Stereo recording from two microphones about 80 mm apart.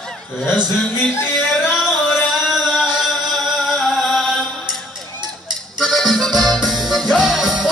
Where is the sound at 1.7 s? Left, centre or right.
Centre.